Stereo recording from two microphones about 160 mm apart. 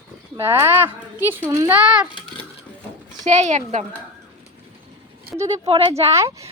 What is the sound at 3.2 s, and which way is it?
Speech, 45° right (ahead or behind).